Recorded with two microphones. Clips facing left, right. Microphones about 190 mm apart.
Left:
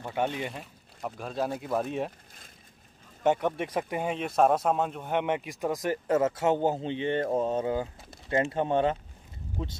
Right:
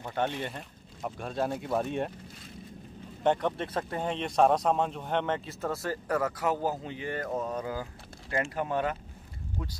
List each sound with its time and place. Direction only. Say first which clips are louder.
0.0 s speech: left 1 dB; 10° left (ahead or behind)
3.3 s speech: left 1 dB; 10° left (ahead or behind)